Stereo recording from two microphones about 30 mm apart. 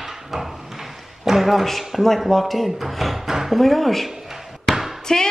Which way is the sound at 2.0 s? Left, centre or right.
Centre.